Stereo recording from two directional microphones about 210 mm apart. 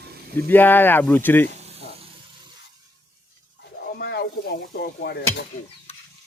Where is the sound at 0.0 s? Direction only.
50° right (ahead or behind).